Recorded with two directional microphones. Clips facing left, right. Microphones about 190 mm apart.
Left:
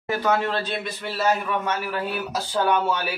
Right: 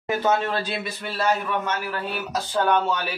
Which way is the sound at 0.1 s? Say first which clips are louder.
Right 1 dB; 25° right (ahead or behind).